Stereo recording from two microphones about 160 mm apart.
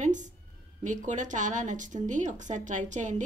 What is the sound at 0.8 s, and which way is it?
A woman's voice, 50° right (ahead or behind).